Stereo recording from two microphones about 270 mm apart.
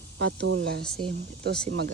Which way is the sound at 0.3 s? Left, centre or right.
Right.